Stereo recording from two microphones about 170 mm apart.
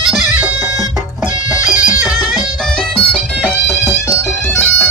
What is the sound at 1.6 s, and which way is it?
Music, 5° right (ahead or behind).